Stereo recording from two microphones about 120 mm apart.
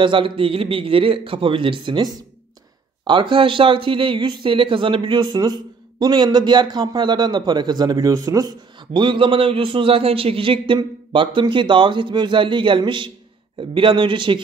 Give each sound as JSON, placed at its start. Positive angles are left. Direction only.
{"t": 0.0, "sound": "speech", "side_deg": -45}